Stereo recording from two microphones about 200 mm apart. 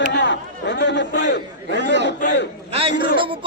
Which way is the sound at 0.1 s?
60° left (ahead or behind).